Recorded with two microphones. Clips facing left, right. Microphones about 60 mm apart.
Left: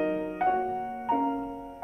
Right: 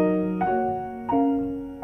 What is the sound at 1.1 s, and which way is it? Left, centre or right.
Music, centre.